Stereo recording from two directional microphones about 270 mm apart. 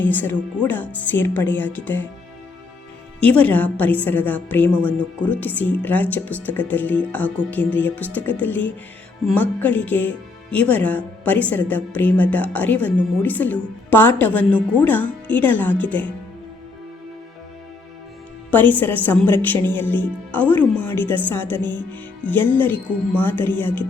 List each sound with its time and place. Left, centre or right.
0.0 s speech: centre
3.2 s speech: centre
18.5 s speech: centre
21.6 s speech: centre
21.9 s speech: centre